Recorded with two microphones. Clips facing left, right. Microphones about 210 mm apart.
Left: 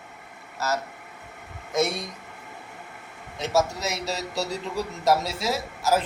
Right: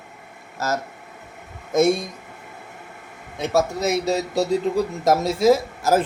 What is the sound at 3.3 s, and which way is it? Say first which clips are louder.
A man's voice: right 3 dB; 55° right (ahead or behind).